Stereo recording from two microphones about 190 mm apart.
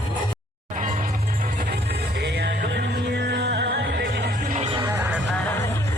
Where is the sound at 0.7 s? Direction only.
40° right (ahead or behind); by 4.5 s 60° right (ahead or behind).